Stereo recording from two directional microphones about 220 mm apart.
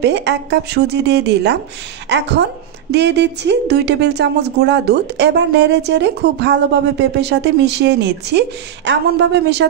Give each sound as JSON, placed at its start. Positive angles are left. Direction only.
{"t": 0.0, "sound": "a woman's voice", "side_deg": -50}